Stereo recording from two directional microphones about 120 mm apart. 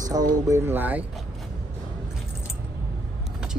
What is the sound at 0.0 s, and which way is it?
Speech, 30° right (ahead or behind).